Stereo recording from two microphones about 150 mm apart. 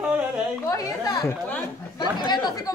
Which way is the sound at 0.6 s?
25° left (ahead or behind).